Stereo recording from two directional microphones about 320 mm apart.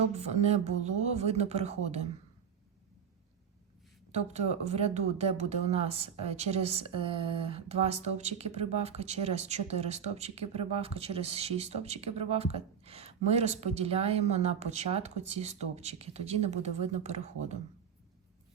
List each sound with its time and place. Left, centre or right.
0.2 s speech: centre
4.1 s speech: right